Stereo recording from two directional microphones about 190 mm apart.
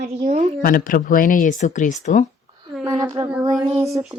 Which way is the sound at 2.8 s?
15° right (ahead or behind).